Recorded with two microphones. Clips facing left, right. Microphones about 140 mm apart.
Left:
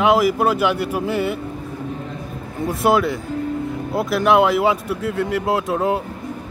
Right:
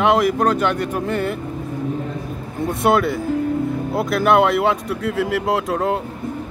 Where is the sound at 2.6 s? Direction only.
Centre (ahead or behind).